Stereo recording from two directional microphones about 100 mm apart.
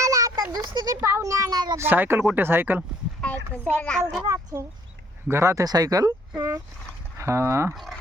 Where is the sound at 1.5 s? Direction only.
45° right (ahead or behind).